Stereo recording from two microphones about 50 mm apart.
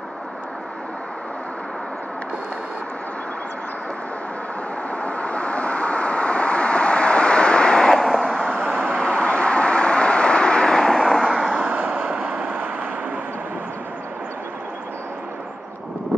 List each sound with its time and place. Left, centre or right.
4.9 s vehicle: left
11.6 s vehicle: right